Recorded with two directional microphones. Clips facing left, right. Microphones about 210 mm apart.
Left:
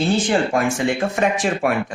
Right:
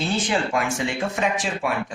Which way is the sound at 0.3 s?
50° left (ahead or behind).